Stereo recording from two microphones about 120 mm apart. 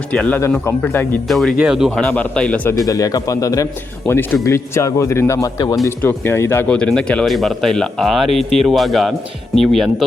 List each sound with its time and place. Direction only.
0.1 s a man's voice: 10° left (ahead or behind)
1.3 s speech: centre (ahead or behind)
2.0 s a man's voice: 10° left (ahead or behind)
2.7 s a man's voice: 30° left (ahead or behind)
5.8 s a man's voice: 20° left (ahead or behind)
6.7 s speech: 5° left (ahead or behind)